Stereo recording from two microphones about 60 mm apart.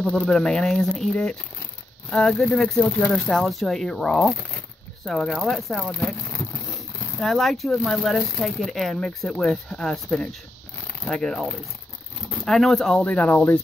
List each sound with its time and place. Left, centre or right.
0.0 s speech: centre
0.3 s speech: centre
3.4 s speech: centre
12.4 s speech: centre
13.0 s speech: left